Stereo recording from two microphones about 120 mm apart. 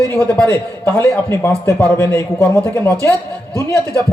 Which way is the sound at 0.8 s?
20° left (ahead or behind).